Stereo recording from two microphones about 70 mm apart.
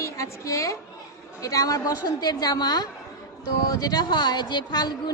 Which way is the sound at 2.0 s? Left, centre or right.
Left.